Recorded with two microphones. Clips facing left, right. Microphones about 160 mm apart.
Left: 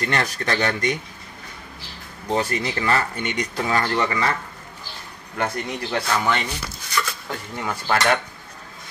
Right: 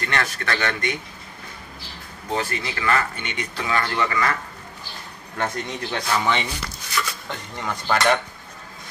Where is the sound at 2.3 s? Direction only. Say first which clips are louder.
Left 3 dB; 35° left (ahead or behind).